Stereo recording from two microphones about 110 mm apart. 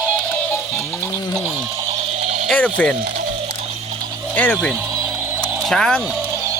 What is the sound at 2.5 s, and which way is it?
Speech, 15° left (ahead or behind).